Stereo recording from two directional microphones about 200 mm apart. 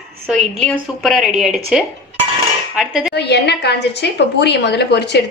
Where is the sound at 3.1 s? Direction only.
55° left (ahead or behind).